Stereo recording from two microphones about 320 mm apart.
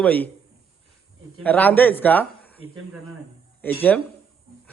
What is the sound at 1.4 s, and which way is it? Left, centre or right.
A man's voice, centre.